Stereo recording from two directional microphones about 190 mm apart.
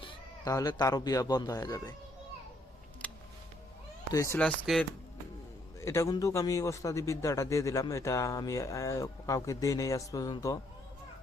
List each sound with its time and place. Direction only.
0.0 s speech: 20° left (ahead or behind)
3.0 s music: 5° left (ahead or behind)
4.1 s a man's voice: 15° left (ahead or behind)
4.4 s speech: 5° left (ahead or behind)
5.8 s a man's voice: 15° left (ahead or behind)